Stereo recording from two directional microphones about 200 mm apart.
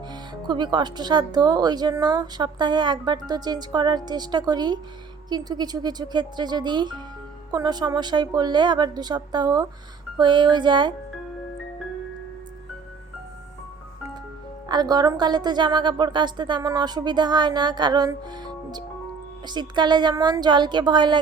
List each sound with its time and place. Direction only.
0.1 s speech: 25° right (ahead or behind)
14.7 s speech: 20° right (ahead or behind)